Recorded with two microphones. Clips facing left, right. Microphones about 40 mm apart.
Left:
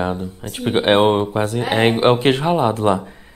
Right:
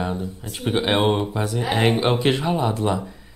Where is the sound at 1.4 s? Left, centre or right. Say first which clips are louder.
Left 2 dB; left.